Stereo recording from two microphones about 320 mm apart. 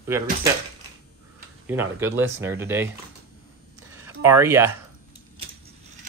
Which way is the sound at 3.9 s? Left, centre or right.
Centre.